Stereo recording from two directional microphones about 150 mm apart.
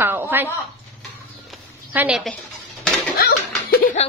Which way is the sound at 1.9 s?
10° right (ahead or behind).